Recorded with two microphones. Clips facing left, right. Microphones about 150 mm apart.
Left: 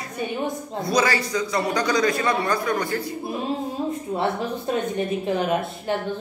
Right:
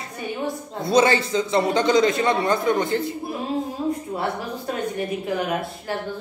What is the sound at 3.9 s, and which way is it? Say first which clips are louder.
A woman's voice: left 1 dB; 25° left (ahead or behind).